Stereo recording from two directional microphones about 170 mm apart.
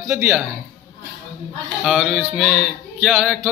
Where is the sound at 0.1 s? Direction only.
5° right (ahead or behind).